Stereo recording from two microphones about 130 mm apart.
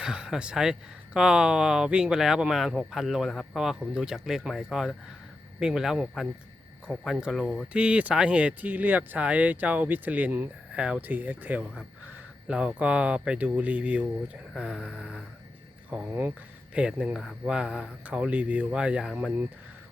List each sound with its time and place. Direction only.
0.0 s speech: 5° right (ahead or behind)
15.9 s speech: 15° right (ahead or behind)